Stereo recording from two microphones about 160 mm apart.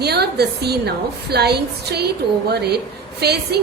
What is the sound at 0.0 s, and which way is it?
A woman's voice, 90° right.